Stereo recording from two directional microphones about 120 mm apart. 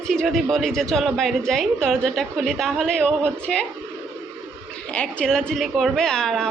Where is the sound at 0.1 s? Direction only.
Centre (ahead or behind).